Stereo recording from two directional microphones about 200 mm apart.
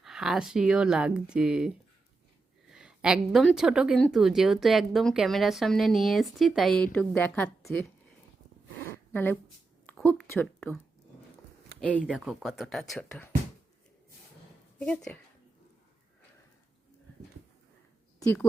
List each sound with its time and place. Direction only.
0.0 s speech: centre (ahead or behind)
8.9 s a sound: 10° left (ahead or behind)
12.0 s speech: 5° right (ahead or behind)
14.8 s speech: 5° left (ahead or behind)
18.2 s speech: 10° left (ahead or behind)